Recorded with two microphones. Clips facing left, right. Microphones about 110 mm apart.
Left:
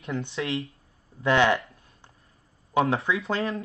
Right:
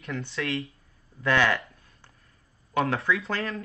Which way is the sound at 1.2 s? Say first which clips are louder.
Left 3 dB; 20° left (ahead or behind).